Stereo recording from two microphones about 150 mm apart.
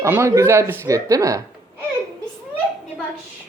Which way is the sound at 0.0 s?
20° right (ahead or behind).